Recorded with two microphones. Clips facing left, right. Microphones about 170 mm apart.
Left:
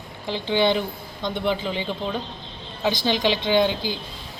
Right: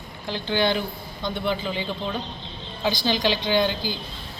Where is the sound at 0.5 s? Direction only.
20° left (ahead or behind).